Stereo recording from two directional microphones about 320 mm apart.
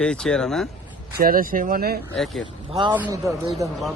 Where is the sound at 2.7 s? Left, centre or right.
Centre.